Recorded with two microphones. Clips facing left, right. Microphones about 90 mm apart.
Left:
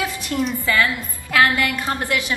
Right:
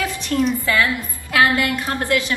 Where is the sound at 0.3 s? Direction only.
15° left (ahead or behind).